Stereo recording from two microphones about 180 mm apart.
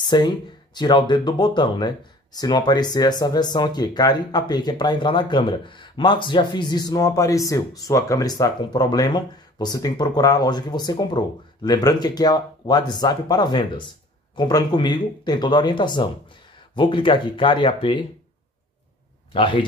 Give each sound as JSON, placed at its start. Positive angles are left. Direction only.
{"t": 0.0, "sound": "speech", "side_deg": 25}
{"t": 19.3, "sound": "speech", "side_deg": 25}